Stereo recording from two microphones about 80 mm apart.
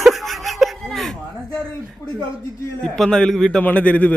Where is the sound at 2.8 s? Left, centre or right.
Centre.